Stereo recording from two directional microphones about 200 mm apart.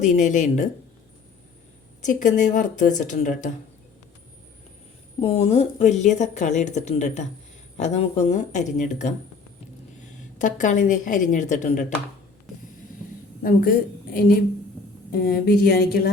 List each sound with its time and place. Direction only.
0.0 s speech: 35° left (ahead or behind)
2.0 s speech: 40° left (ahead or behind)
5.2 s speech: 30° left (ahead or behind)
10.3 s speech: 40° left (ahead or behind)
13.4 s a woman's voice: 45° left (ahead or behind)